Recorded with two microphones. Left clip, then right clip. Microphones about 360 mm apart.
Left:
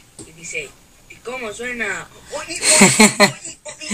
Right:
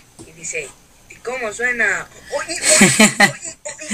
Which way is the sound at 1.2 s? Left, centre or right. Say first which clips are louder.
Right 6 dB; right.